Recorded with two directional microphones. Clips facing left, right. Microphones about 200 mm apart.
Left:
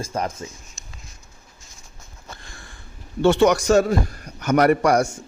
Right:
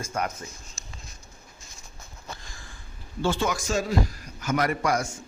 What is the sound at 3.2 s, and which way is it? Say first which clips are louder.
A man's voice: left 10 dB; 70° left (ahead or behind).